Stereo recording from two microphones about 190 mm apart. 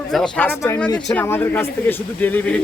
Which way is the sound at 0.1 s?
5° left (ahead or behind).